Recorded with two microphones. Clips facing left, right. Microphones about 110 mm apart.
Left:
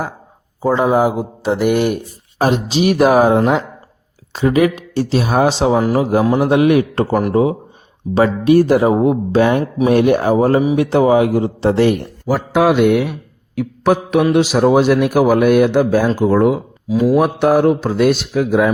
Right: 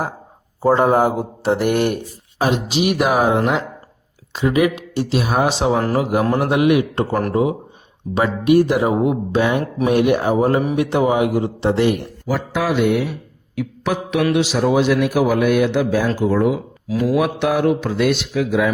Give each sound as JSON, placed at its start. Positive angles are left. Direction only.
{"t": 0.6, "sound": "speech", "side_deg": 0}
{"t": 2.6, "sound": "speech", "side_deg": 30}
{"t": 4.3, "sound": "speech", "side_deg": 40}
{"t": 5.7, "sound": "speech", "side_deg": 10}
{"t": 6.0, "sound": "mantra", "side_deg": 25}
{"t": 6.2, "sound": "speech", "side_deg": 5}
{"t": 6.5, "sound": "speech", "side_deg": 35}
{"t": 7.1, "sound": "speech", "side_deg": 10}
{"t": 8.1, "sound": "speech", "side_deg": 30}
{"t": 12.5, "sound": "mantra", "side_deg": 60}
{"t": 13.6, "sound": "mantra", "side_deg": 50}
{"t": 14.3, "sound": "speech", "side_deg": 45}
{"t": 16.9, "sound": "speech", "side_deg": 15}
{"t": 17.2, "sound": "speech", "side_deg": 40}